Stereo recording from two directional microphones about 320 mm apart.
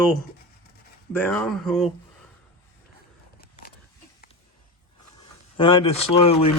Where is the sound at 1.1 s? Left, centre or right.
Centre.